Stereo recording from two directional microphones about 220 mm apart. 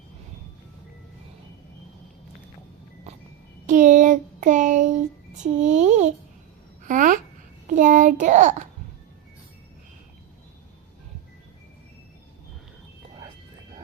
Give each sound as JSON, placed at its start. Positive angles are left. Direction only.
{"t": 3.7, "sound": "child singing", "side_deg": -35}
{"t": 5.4, "sound": "a child's voice", "side_deg": -35}
{"t": 6.8, "sound": "babbling", "side_deg": -35}
{"t": 7.7, "sound": "a sound", "side_deg": -35}